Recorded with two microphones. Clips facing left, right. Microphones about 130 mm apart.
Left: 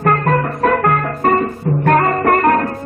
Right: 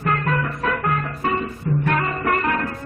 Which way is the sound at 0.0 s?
50° left (ahead or behind).